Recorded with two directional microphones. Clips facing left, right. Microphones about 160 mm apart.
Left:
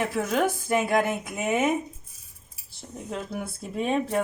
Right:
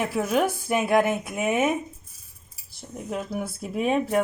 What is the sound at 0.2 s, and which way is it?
Speech, 10° right (ahead or behind).